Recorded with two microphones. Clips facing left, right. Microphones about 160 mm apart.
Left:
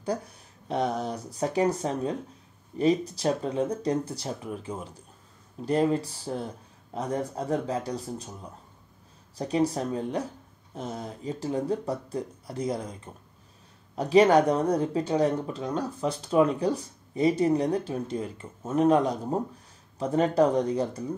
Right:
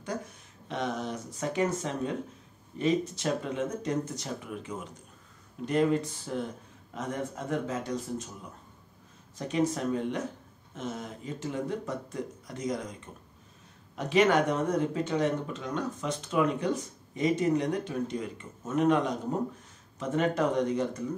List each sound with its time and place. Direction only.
0.7 s speech: 35° left (ahead or behind)
9.4 s speech: 35° left (ahead or behind)